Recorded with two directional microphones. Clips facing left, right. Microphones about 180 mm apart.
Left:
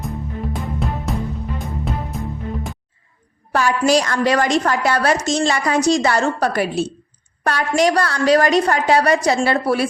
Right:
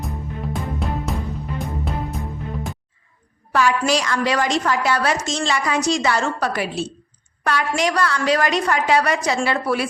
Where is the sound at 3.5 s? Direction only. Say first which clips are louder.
Left 3 dB; 45° left (ahead or behind).